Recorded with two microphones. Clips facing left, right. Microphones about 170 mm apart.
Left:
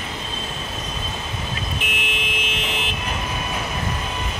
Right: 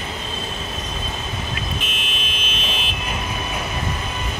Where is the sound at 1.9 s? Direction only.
15° left (ahead or behind).